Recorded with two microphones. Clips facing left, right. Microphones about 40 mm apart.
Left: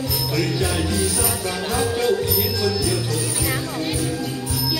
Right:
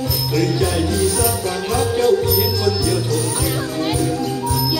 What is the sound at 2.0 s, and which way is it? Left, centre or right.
Music, centre.